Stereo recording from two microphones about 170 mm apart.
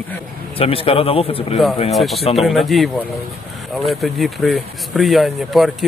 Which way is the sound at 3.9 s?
Centre (ahead or behind).